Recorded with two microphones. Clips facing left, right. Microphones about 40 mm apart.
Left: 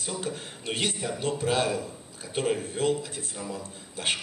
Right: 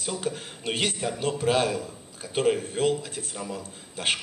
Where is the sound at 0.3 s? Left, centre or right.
Right.